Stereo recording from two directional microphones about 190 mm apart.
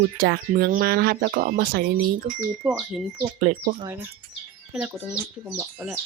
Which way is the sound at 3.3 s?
40° right (ahead or behind).